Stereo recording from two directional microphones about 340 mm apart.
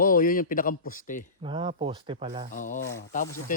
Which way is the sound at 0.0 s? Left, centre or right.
Left.